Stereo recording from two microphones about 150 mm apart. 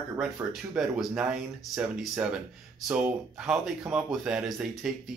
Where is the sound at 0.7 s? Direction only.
5° right (ahead or behind).